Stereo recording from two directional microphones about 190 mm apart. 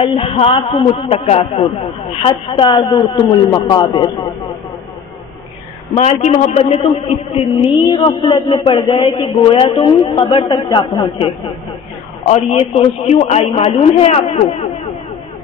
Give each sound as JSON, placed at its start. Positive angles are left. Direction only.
{"t": 0.0, "sound": "a man's voice", "side_deg": 30}
{"t": 5.9, "sound": "a man's voice", "side_deg": 35}